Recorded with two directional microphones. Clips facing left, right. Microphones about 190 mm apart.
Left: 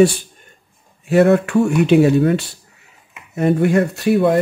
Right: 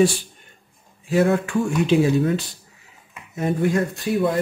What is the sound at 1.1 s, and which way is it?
Speech, 65° left (ahead or behind).